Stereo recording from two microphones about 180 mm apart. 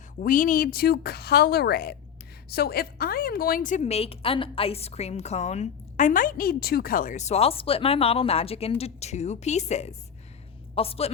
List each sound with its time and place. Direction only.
0.2 s a woman's voice: 45° left (ahead or behind)